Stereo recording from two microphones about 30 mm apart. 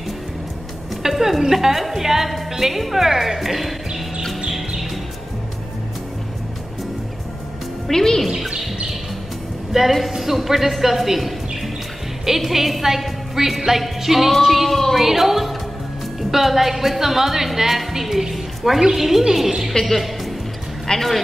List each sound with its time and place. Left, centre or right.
1.0 s a woman's voice: centre
4.5 s music: centre
7.9 s speech: centre
9.7 s a woman's voice: centre
19.7 s speech: centre